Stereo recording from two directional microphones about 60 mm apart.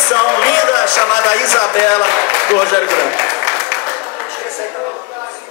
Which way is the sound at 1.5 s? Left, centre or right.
Left.